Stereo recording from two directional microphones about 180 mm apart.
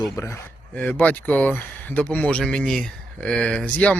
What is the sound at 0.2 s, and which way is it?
Speech, 15° left (ahead or behind).